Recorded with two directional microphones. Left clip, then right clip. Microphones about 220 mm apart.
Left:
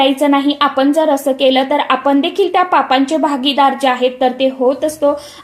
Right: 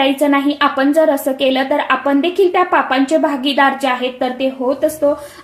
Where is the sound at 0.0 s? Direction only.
30° left (ahead or behind).